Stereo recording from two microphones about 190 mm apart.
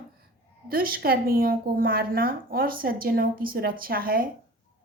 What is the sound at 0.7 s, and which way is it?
A woman's voice, 50° right (ahead or behind).